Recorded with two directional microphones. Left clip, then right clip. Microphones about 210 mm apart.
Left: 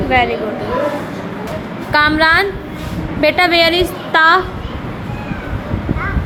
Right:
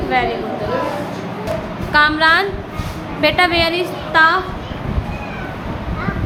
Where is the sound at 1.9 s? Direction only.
20° left (ahead or behind).